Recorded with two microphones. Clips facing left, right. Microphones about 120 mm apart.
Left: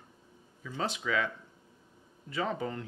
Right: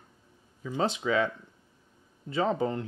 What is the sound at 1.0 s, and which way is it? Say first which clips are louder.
Speech: right 4 dB; 30° right (ahead or behind).